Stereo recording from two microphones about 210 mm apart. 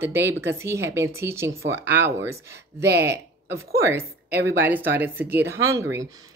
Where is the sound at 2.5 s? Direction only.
50° right (ahead or behind).